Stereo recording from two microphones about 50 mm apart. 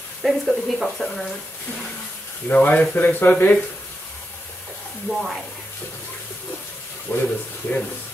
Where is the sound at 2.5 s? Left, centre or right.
Left.